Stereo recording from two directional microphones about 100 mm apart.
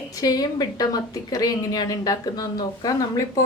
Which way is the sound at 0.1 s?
40° left (ahead or behind).